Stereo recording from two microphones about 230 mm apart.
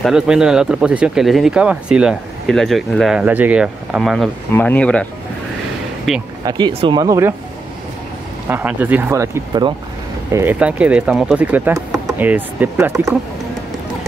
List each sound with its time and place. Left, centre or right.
0.0 s speech: centre
6.1 s speech: centre
6.4 s speech: centre
8.5 s speech: centre
10.3 s speech: centre